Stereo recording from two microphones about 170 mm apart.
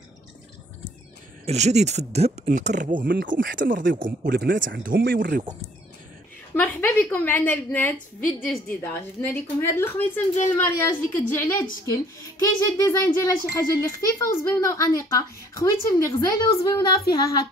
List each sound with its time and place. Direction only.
1.4 s speech: 40° right (ahead or behind); by 5.4 s 65° right (ahead or behind)
6.5 s a woman's voice: 10° left (ahead or behind)
8.2 s a woman's voice: 55° left (ahead or behind)
8.8 s a woman's voice: 10° left (ahead or behind)